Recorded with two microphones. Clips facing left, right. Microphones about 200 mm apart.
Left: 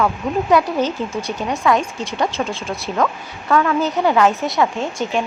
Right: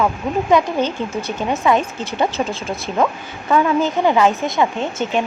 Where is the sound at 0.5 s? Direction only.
Centre (ahead or behind).